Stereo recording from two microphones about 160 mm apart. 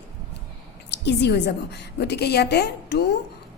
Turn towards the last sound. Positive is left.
turn(degrees=90)